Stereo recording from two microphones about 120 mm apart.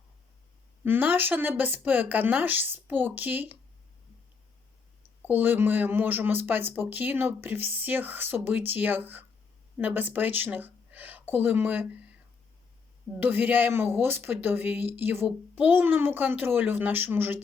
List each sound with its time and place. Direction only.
0.9 s a woman's voice: 15° right (ahead or behind)
5.2 s a woman's voice: 15° right (ahead or behind)
13.1 s a woman's voice: 15° right (ahead or behind)